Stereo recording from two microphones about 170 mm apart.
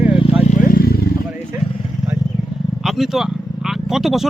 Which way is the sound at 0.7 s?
65° left (ahead or behind).